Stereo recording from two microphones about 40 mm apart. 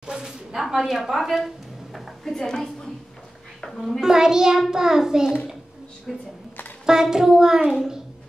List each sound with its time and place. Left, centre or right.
0.0 s a sound: centre
0.6 s a woman's voice: centre
2.3 s a woman's voice: centre
3.7 s a child's voice: centre
4.0 s child singing: centre
6.1 s a child's voice: centre
6.9 s child singing: centre